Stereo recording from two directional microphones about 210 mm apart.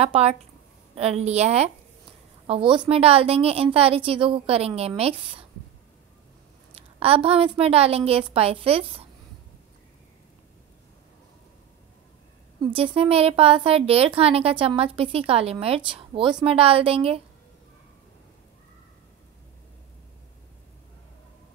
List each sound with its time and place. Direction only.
0.0 s a woman's voice: 30° right (ahead or behind)
6.7 s a woman's voice: 25° right (ahead or behind)
12.7 s a woman's voice: 25° right (ahead or behind)